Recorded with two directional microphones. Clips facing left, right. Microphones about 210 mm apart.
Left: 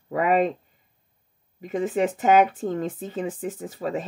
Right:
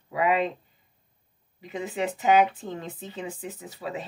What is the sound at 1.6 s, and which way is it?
Speech, 50° left (ahead or behind).